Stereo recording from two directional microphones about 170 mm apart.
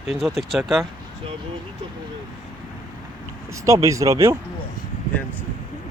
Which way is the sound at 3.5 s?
20° right (ahead or behind).